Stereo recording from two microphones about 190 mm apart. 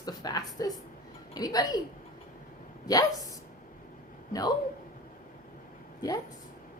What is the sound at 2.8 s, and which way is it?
Speech, 20° left (ahead or behind).